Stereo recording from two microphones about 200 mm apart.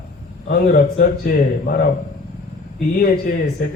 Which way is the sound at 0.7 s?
45° left (ahead or behind).